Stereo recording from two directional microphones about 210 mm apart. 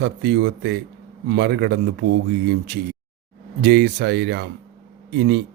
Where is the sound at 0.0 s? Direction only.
55° right (ahead or behind).